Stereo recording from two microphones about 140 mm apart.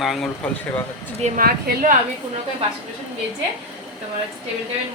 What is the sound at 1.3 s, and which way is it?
Speech, 80° right.